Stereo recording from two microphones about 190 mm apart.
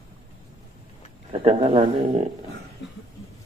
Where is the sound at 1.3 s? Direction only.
30° right (ahead or behind).